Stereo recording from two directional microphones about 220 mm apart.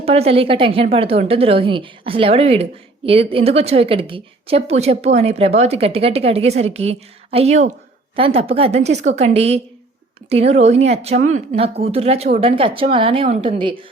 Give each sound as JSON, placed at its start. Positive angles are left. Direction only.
{"t": 0.0, "sound": "a woman's voice", "side_deg": -25}